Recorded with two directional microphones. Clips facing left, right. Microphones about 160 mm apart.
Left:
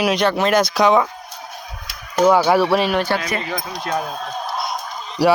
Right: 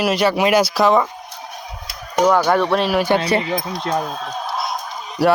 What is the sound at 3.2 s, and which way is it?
Speech, 30° right (ahead or behind).